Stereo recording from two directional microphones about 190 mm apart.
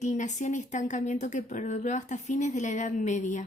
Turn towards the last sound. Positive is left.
turn(degrees=40)  # may be behind; listen again after turning